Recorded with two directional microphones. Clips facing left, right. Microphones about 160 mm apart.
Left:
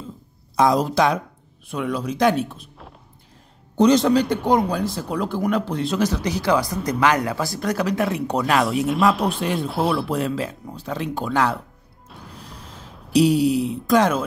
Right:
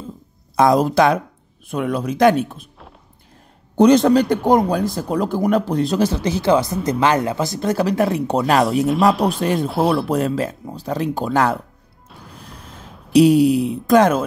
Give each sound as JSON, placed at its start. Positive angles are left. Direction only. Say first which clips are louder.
{"t": 0.6, "sound": "speech", "louder": "right 4 dB", "side_deg": -55}
{"t": 3.7, "sound": "speech", "louder": "right 4 dB", "side_deg": -55}
{"t": 6.2, "sound": "speech", "louder": "right 4 dB", "side_deg": -25}
{"t": 9.1, "sound": "speech", "louder": "right 4 dB", "side_deg": 0}
{"t": 9.4, "sound": "speech", "louder": "right 4 dB", "side_deg": -45}
{"t": 9.7, "sound": "speech", "louder": "right 3 dB", "side_deg": 0}
{"t": 10.0, "sound": "speech", "louder": "right 4 dB", "side_deg": -45}
{"t": 12.1, "sound": "music", "louder": "even", "side_deg": 0}
{"t": 13.1, "sound": "speech", "louder": "right 5 dB", "side_deg": -55}